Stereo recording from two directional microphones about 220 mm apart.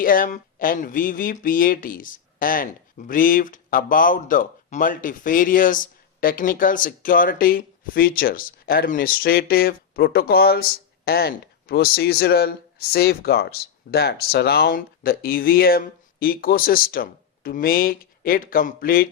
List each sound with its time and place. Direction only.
0.0 s speech: 40° left (ahead or behind)